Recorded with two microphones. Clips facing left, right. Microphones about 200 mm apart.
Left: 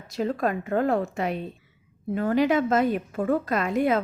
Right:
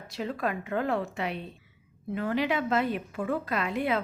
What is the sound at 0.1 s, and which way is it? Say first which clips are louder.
A woman's voice: left 6 dB; 45° left (ahead or behind).